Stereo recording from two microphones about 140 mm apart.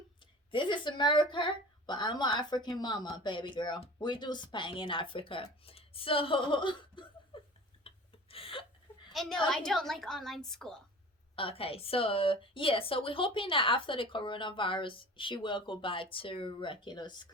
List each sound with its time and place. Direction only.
0.5 s a woman's voice: 35° left (ahead or behind)
7.3 s a sound: 40° left (ahead or behind)
9.1 s a woman's voice: 5° left (ahead or behind)
11.3 s a woman's voice: 40° left (ahead or behind)